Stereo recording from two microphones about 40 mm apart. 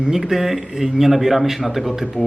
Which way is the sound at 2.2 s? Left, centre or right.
Left.